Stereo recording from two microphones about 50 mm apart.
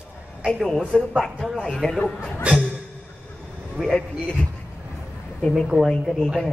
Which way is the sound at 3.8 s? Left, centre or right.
Centre.